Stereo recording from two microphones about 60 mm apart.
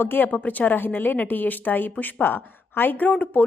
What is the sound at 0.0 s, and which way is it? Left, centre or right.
A woman's voice, left.